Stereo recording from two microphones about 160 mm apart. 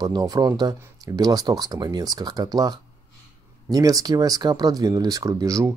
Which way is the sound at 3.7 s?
20° right (ahead or behind).